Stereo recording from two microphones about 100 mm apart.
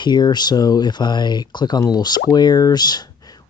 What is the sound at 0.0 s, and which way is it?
Speech, 45° left (ahead or behind).